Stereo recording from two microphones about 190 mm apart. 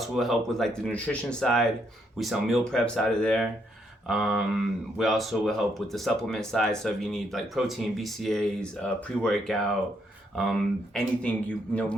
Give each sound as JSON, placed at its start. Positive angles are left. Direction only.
{"t": 0.0, "sound": "speech", "side_deg": 0}